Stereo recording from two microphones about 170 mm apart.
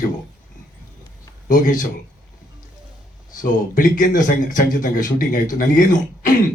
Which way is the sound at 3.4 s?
55° left (ahead or behind).